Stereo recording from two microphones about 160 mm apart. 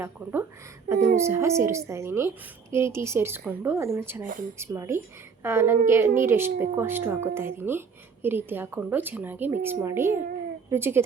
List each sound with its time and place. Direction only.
0.0 s a woman's voice: 15° right (ahead or behind)